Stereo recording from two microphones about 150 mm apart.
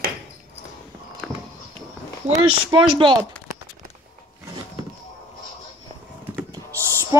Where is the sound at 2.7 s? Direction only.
35° right (ahead or behind).